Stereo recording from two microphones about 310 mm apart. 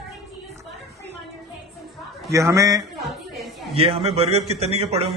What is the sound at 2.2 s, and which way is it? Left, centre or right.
Speech, centre.